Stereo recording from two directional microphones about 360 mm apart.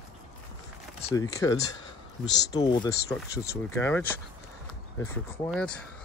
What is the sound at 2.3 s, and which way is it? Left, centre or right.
Speech, left.